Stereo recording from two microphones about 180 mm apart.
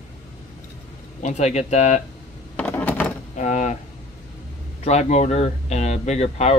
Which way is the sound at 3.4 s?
40° left (ahead or behind).